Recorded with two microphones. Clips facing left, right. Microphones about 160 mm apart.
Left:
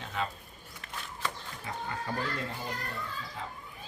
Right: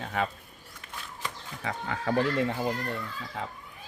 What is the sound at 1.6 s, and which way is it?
Speech, 90° right.